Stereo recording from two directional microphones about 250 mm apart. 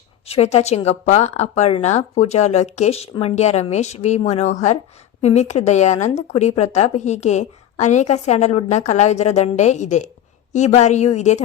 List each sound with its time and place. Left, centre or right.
0.3 s a woman's voice: left